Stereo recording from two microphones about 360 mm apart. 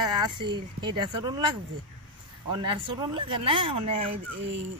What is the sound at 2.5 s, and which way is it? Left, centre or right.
Speech, centre.